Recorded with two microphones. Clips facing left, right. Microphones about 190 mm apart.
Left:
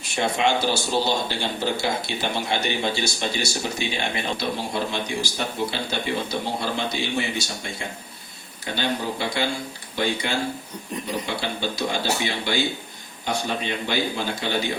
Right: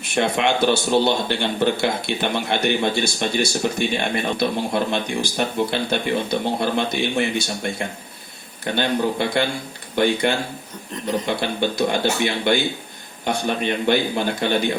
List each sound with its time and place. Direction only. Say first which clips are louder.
0.0 s a man's voice: right 3 dB; 60° right (ahead or behind)